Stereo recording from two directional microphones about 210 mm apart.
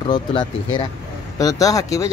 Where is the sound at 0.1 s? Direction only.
25° left (ahead or behind).